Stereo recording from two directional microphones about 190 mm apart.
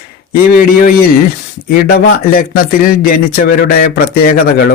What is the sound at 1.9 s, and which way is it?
Speech, 50° left (ahead or behind).